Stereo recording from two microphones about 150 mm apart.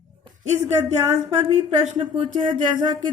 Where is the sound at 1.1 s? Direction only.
50° right (ahead or behind).